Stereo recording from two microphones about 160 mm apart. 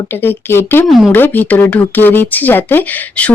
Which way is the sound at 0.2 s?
15° left (ahead or behind).